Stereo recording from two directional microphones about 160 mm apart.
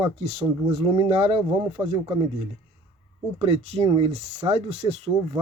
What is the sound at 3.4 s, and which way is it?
Speech, 40° right (ahead or behind).